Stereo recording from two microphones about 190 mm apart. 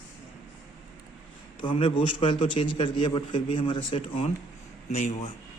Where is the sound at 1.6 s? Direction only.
25° left (ahead or behind).